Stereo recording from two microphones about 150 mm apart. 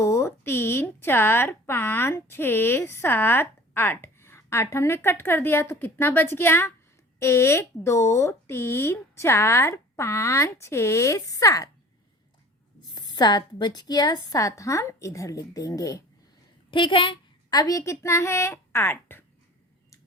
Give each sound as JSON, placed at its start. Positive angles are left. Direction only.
{"t": 0.0, "sound": "speech", "side_deg": 20}
{"t": 12.9, "sound": "a woman's voice", "side_deg": 30}
{"t": 16.7, "sound": "a woman's voice", "side_deg": 35}